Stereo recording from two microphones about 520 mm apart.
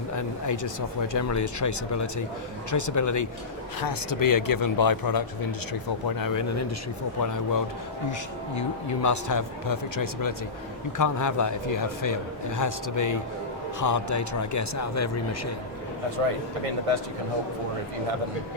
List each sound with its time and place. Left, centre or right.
0.2 s a man's voice: left
9.0 s a man's voice: left
16.9 s speech: right